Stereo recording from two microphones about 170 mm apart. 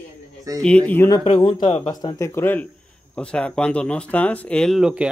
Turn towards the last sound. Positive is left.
turn(degrees=-5)  # may be behind; listen again after turning